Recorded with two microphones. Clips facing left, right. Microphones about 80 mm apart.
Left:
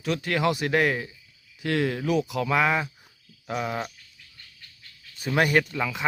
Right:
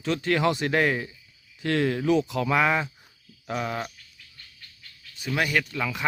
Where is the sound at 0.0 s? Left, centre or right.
Centre.